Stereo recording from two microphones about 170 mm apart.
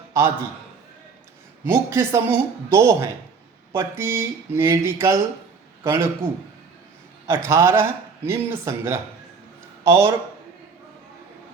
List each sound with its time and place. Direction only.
0.1 s a man's voice: 15° right (ahead or behind)
1.6 s a man's voice: 15° right (ahead or behind)